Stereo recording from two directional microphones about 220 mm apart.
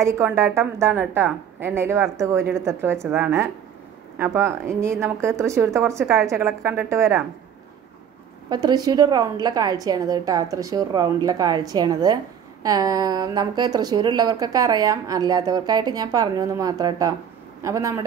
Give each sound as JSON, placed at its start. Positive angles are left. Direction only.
{"t": 0.0, "sound": "speech", "side_deg": -10}
{"t": 8.5, "sound": "speech", "side_deg": -20}